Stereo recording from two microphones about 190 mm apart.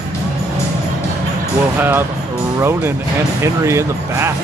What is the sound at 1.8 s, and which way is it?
Speech, 10° right (ahead or behind).